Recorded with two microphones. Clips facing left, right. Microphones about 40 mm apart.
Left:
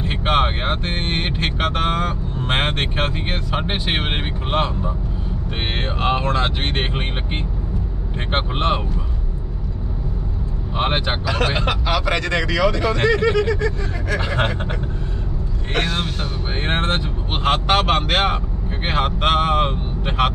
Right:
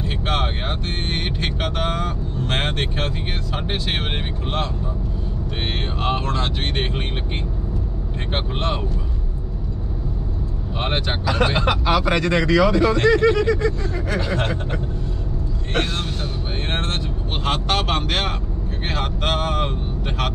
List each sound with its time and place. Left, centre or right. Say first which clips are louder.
0.0 s speech: left 5 dB; left
8.3 s speech: left 4 dB; left
10.8 s speech: left 3 dB; centre
11.3 s speech: right 3 dB; centre
12.8 s speech: right 2 dB; centre
14.1 s speech: left 3 dB; left
15.8 s speech: left 3 dB; left